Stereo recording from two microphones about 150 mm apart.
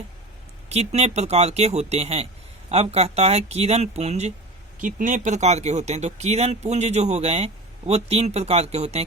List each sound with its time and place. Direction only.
0.7 s speech: 45° right (ahead or behind)
4.8 s speech: 60° right (ahead or behind); by 9.0 s 45° right (ahead or behind)